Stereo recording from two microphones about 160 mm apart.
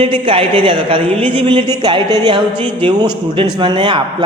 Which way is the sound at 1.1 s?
10° left (ahead or behind).